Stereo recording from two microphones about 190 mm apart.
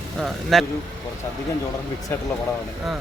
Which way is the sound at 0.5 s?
Centre (ahead or behind).